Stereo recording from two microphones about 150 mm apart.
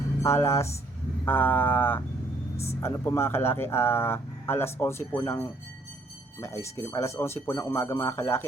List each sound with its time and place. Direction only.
0.2 s speech: 20° left (ahead or behind)